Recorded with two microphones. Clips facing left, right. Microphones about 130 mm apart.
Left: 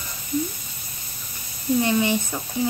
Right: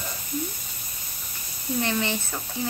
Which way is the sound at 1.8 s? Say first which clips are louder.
Left 4 dB; 15° left (ahead or behind).